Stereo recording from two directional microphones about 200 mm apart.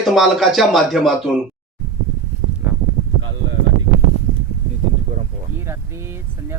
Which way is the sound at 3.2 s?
70° right (ahead or behind).